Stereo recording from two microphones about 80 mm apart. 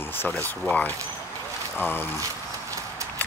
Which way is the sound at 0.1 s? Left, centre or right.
Left.